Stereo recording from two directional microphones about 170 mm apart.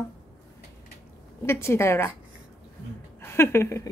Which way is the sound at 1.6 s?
15° left (ahead or behind).